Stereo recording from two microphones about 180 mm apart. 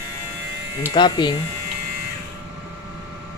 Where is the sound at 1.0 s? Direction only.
25° left (ahead or behind).